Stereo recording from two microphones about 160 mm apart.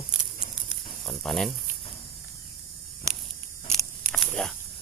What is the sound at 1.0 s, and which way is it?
Speech, 5° left (ahead or behind).